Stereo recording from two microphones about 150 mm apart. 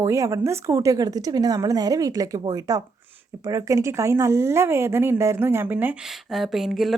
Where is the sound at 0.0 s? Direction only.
20° right (ahead or behind).